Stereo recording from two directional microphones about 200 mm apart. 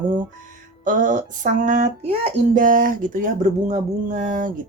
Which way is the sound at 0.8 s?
40° right (ahead or behind).